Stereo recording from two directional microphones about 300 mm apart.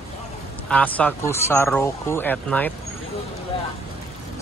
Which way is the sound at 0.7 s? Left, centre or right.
Centre.